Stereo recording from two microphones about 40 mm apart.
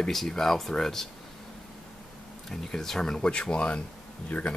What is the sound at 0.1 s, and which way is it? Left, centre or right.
Speech, centre.